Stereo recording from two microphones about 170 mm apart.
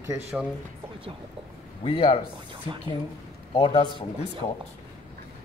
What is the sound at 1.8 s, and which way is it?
Speech, 30° left (ahead or behind).